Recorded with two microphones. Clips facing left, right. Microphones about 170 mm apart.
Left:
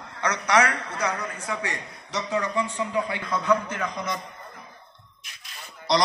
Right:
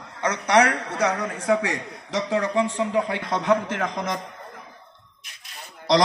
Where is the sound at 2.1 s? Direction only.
90° right.